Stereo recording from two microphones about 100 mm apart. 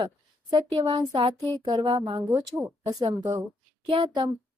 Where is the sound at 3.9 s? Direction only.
55° right (ahead or behind).